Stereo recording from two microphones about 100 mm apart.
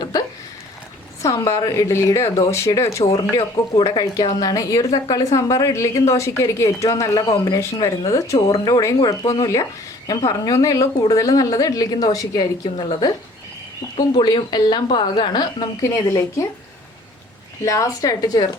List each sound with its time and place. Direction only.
0.0 s a sound: 45° left (ahead or behind)
1.2 s a woman's voice: 30° left (ahead or behind)
3.2 s a woman's voice: 45° left (ahead or behind)
15.8 s a woman's voice: 30° left (ahead or behind)
17.7 s a woman's voice: 35° left (ahead or behind)